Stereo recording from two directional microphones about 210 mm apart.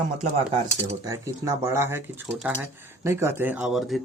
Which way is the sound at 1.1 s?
15° right (ahead or behind).